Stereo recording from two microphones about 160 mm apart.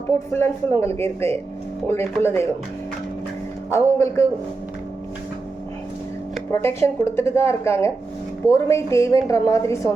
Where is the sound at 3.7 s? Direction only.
20° left (ahead or behind).